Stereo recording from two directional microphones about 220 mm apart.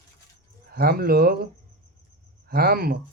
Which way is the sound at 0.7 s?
45° right (ahead or behind).